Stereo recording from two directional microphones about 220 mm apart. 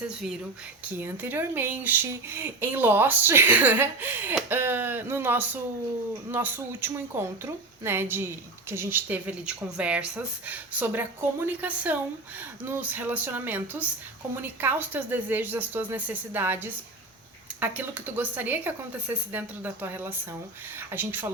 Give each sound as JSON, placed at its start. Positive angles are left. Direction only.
{"t": 0.9, "sound": "speech", "side_deg": -10}